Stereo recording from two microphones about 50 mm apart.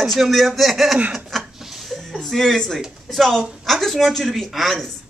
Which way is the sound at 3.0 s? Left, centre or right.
Centre.